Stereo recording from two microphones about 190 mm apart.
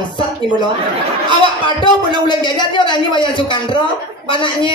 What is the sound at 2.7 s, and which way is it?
A woman's voice, 25° left (ahead or behind).